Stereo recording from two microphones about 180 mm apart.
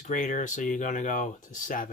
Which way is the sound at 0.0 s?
45° left (ahead or behind).